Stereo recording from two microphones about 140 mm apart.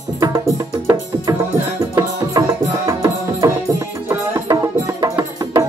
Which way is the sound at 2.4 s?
25° right (ahead or behind).